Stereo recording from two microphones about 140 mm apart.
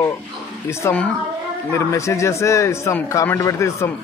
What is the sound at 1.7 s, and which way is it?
A man's voice, 20° left (ahead or behind).